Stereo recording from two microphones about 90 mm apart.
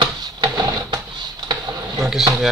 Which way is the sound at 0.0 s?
60° right (ahead or behind).